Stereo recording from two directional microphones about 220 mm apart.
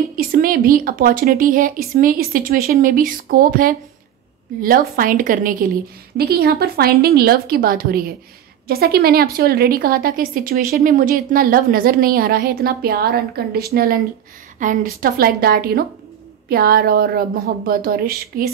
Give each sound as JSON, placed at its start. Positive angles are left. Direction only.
{"t": 0.1, "sound": "a woman's voice", "side_deg": -40}